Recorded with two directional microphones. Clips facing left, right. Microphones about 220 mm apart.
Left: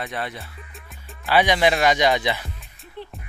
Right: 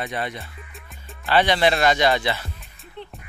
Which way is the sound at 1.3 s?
10° left (ahead or behind).